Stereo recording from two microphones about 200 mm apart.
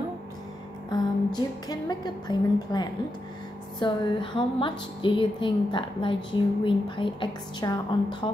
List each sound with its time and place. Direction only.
0.8 s a woman's voice: 20° left (ahead or behind)